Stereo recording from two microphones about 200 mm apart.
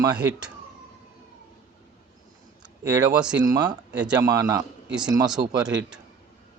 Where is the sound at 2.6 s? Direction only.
5° right (ahead or behind).